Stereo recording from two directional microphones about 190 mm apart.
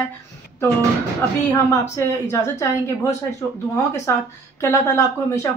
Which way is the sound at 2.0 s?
15° left (ahead or behind).